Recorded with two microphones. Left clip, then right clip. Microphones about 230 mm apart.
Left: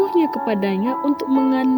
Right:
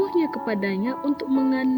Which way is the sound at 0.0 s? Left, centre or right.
Left.